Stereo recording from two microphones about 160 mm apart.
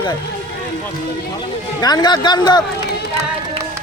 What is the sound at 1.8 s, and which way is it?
Speech, 25° left (ahead or behind).